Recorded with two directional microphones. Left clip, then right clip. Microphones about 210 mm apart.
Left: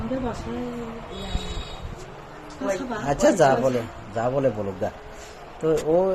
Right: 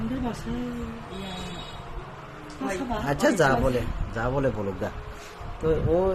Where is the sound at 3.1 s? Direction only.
Centre (ahead or behind).